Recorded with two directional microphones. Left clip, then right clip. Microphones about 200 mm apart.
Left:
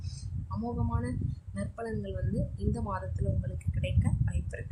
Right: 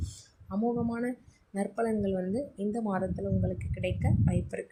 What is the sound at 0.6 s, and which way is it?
A woman's voice, 5° right (ahead or behind).